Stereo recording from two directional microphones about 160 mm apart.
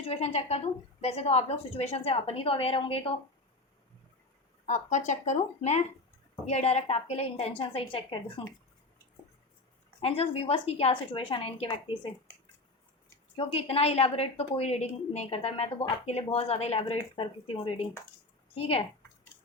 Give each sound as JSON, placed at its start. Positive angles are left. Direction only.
{"t": 0.0, "sound": "a woman's voice", "side_deg": 40}
{"t": 4.6, "sound": "a woman's voice", "side_deg": 50}
{"t": 10.0, "sound": "a woman's voice", "side_deg": 35}
{"t": 13.3, "sound": "a woman's voice", "side_deg": 35}